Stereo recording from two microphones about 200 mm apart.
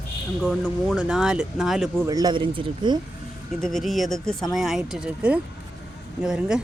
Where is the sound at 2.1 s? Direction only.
20° right (ahead or behind).